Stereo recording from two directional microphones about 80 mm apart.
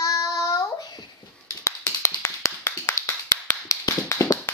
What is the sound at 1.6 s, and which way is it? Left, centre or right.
Tap, left.